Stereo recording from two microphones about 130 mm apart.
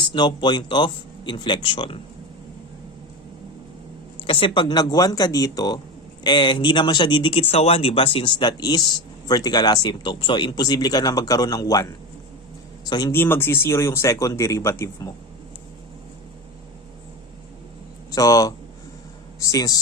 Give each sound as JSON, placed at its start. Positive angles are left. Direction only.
{"t": 0.1, "sound": "speech", "side_deg": 40}
{"t": 4.3, "sound": "speech", "side_deg": 45}
{"t": 13.1, "sound": "speech", "side_deg": 15}
{"t": 18.1, "sound": "speech", "side_deg": 25}